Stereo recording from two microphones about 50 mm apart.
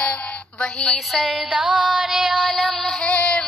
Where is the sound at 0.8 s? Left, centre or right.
Centre.